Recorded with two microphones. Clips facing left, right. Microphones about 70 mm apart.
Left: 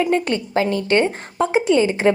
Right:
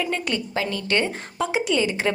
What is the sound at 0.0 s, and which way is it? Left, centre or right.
A woman's voice, left.